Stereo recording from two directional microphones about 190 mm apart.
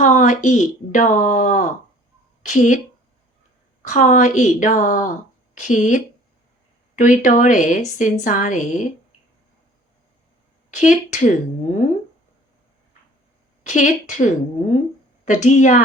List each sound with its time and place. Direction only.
0.0 s speech: 40° left (ahead or behind)
3.8 s speech: 40° left (ahead or behind)
10.8 s a woman's voice: 40° left (ahead or behind)
13.7 s a woman's voice: 40° left (ahead or behind)